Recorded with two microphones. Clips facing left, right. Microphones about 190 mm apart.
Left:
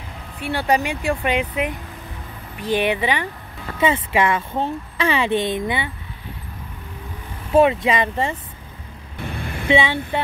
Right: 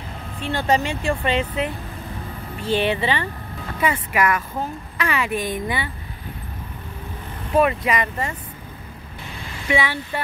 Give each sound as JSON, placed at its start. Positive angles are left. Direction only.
{"t": 0.4, "sound": "speech", "side_deg": 10}
{"t": 3.8, "sound": "a woman's voice", "side_deg": 25}
{"t": 7.5, "sound": "a woman's voice", "side_deg": 25}
{"t": 9.4, "sound": "vehicle", "side_deg": 55}
{"t": 9.7, "sound": "a woman's voice", "side_deg": 25}